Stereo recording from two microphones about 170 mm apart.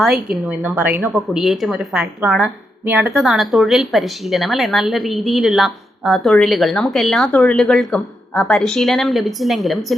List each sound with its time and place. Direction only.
0.0 s a woman's voice: 5° right (ahead or behind)